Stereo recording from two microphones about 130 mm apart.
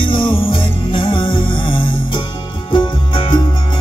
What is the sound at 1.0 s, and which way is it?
Music, 40° left (ahead or behind).